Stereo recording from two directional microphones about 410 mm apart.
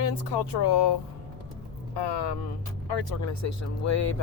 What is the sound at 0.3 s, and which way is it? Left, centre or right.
Speech, left.